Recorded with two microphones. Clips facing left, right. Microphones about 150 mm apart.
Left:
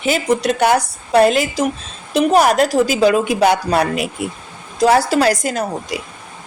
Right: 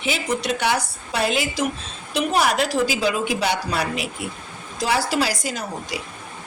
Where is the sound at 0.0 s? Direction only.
45° left (ahead or behind).